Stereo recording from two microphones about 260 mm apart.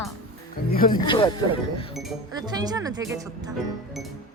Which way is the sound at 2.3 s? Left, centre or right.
Centre.